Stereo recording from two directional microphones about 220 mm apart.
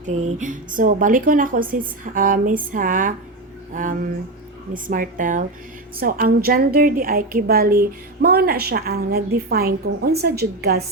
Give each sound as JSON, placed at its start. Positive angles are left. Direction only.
{"t": 0.1, "sound": "a woman's voice", "side_deg": -30}